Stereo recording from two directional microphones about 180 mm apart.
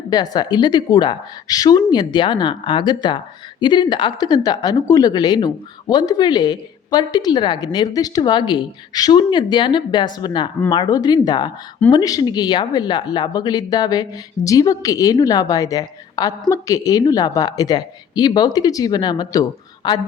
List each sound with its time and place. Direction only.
0.1 s speech: 20° left (ahead or behind)